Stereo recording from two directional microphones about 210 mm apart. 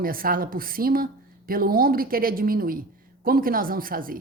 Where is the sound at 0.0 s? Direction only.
45° right (ahead or behind).